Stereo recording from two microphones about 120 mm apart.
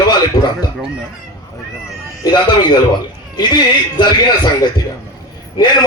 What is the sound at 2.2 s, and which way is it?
Speech, 35° left (ahead or behind).